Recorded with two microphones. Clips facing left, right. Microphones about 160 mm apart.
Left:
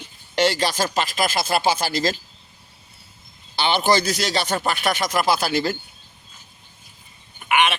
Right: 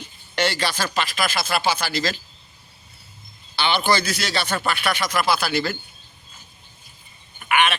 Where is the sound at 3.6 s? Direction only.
40° left (ahead or behind).